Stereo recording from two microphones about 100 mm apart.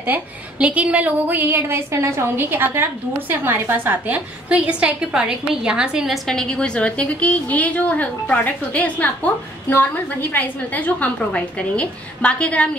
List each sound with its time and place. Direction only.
0.0 s a woman's voice: 15° right (ahead or behind)
6.2 s a woman's voice: 5° left (ahead or behind)